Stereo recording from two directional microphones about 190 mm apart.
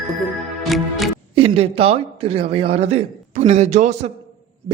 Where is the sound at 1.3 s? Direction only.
30° right (ahead or behind).